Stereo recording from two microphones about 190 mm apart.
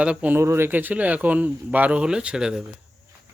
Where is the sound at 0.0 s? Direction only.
5° right (ahead or behind).